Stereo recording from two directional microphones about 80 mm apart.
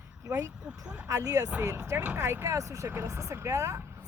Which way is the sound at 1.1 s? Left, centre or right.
Right.